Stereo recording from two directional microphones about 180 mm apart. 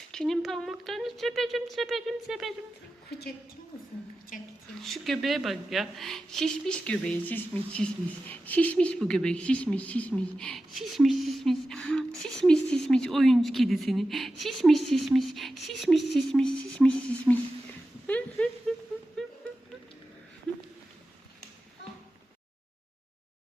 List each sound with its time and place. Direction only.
0.1 s speech: 5° left (ahead or behind)
3.1 s a woman's voice: 65° left (ahead or behind)
4.8 s speech: centre (ahead or behind)
18.0 s a sound: 10° left (ahead or behind)